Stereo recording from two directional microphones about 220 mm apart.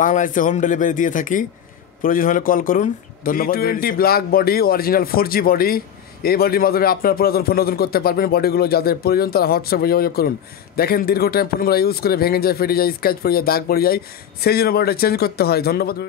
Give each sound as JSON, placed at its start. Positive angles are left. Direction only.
{"t": 0.0, "sound": "speech", "side_deg": 35}